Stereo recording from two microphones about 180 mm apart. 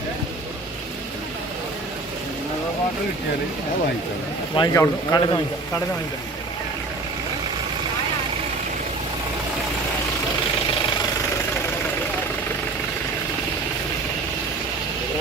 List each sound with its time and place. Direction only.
4.5 s speech: 20° left (ahead or behind)